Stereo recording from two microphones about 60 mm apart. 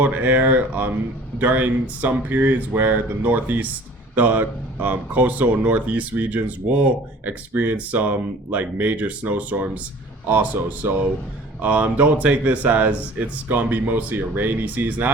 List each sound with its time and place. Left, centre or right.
0.0 s speech: right